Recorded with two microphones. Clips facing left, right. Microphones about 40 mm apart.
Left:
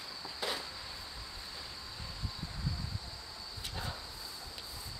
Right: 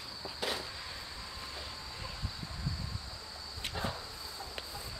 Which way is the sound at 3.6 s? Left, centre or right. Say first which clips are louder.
Right 4 dB; right.